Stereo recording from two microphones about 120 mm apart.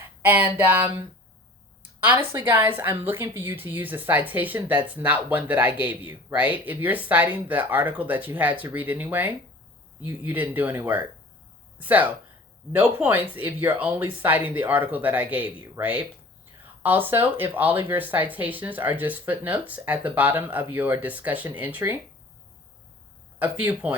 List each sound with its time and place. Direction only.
0.2 s a woman's voice: 15° right (ahead or behind)
2.1 s a woman's voice: 20° right (ahead or behind)
23.4 s a woman's voice: 15° right (ahead or behind)